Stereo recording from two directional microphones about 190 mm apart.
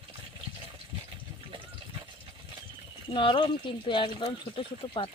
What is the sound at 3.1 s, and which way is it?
Speech, 25° left (ahead or behind).